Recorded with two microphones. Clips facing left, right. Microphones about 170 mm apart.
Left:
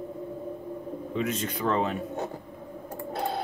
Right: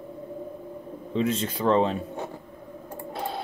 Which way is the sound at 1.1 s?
30° right (ahead or behind).